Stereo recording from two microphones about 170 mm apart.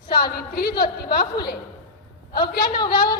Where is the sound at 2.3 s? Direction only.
65° left (ahead or behind).